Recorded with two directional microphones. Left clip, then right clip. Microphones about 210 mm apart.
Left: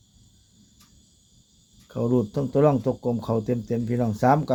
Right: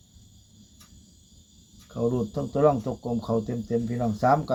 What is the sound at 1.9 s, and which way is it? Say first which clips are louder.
Speech: left 3 dB; 50° left (ahead or behind).